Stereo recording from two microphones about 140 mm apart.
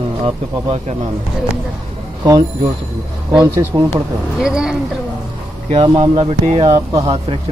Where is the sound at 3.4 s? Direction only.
20° right (ahead or behind).